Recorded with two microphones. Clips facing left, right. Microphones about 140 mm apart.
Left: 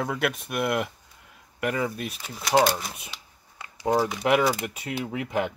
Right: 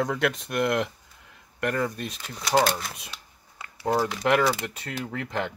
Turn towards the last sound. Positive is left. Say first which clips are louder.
# left 3 dB
turn(degrees=10)  # may be behind; listen again after turning